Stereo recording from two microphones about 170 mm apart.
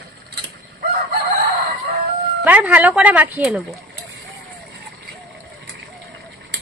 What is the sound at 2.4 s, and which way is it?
Speech, 10° right (ahead or behind).